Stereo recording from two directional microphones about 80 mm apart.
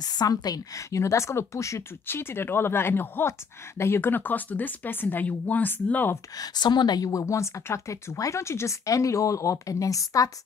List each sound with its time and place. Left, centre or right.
0.0 s speech: left
6.3 s a woman's voice: left
7.1 s speech: left